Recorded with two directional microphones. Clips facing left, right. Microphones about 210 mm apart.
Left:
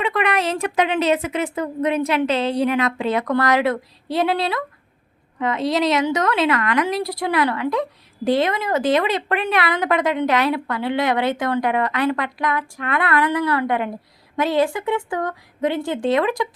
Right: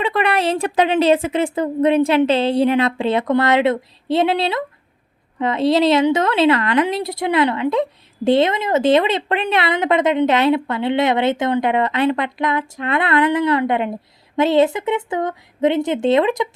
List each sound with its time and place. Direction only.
0.0 s a woman's voice: 30° right (ahead or behind)